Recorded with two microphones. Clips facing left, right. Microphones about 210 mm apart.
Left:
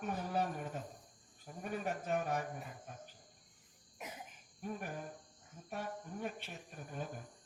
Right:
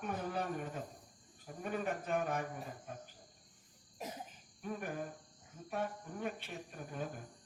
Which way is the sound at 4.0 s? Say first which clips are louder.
Right 4 dB; 35° right (ahead or behind).